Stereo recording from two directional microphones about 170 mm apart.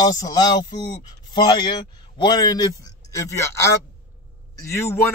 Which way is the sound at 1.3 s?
25° left (ahead or behind).